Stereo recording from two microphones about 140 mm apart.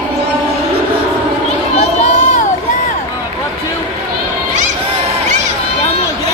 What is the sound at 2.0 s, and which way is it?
Crowd, 60° left (ahead or behind).